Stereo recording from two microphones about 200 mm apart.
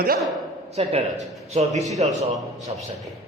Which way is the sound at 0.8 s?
30° right (ahead or behind).